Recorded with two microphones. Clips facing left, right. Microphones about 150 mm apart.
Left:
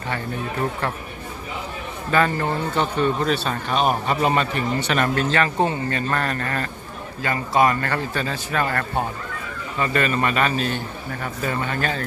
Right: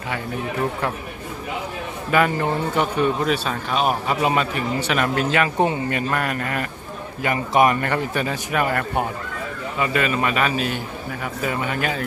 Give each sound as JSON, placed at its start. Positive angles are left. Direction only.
{"t": 2.0, "sound": "speech", "side_deg": -10}